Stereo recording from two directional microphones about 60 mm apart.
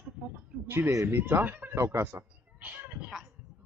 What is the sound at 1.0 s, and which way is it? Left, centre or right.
Speech, right.